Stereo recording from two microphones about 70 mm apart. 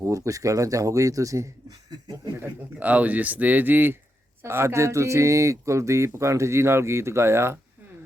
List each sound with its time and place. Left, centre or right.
0.0 s speech: right
2.4 s speech: right
4.4 s speech: right